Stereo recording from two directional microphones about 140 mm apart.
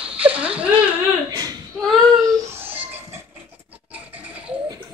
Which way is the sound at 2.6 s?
15° right (ahead or behind).